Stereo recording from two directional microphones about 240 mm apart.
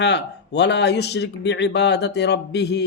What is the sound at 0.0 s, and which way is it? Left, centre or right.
A man's voice, left.